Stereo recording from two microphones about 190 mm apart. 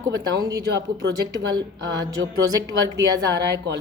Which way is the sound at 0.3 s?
20° right (ahead or behind).